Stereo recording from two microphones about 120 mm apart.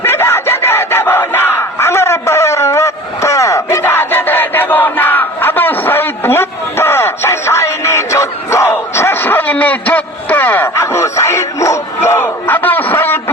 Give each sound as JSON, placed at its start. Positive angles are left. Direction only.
{"t": 0.0, "sound": "battle cry", "side_deg": 20}